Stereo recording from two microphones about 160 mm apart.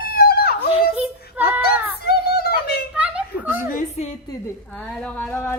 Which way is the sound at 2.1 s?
75° left (ahead or behind).